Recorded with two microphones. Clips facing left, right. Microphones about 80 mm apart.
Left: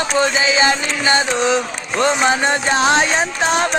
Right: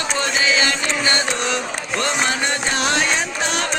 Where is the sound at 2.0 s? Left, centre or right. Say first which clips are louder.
Left 7 dB; left.